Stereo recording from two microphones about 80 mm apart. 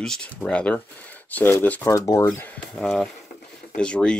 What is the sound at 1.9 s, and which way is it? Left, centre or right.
Speech, left.